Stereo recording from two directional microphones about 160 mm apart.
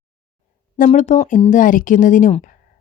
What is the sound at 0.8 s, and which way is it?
A woman's voice, 50° left (ahead or behind).